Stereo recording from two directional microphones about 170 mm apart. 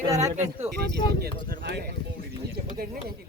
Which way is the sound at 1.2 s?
65° right (ahead or behind).